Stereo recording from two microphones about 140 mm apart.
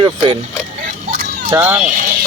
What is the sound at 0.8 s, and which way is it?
Vehicle, 75° right (ahead or behind).